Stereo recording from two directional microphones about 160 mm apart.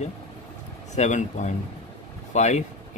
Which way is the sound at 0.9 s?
50° left (ahead or behind).